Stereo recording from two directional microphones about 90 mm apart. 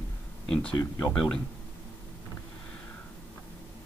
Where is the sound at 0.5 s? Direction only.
10° left (ahead or behind).